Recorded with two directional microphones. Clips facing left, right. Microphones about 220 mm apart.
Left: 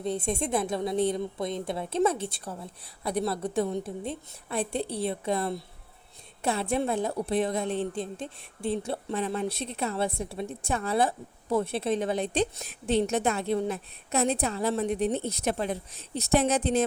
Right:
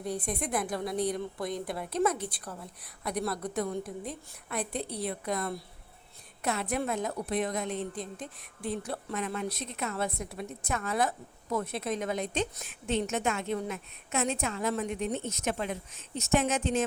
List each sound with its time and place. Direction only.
0.0 s a woman's voice: 25° left (ahead or behind)